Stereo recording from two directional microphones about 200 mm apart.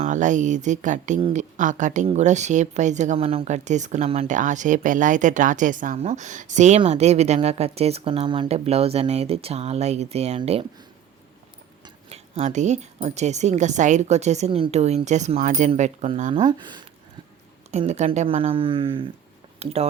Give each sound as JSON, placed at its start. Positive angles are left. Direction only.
{"t": 0.0, "sound": "a woman's voice", "side_deg": -40}
{"t": 12.0, "sound": "a woman's voice", "side_deg": -35}
{"t": 17.7, "sound": "speech", "side_deg": -35}